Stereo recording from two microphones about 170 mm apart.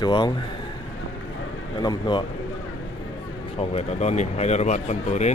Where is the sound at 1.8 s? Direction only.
25° left (ahead or behind).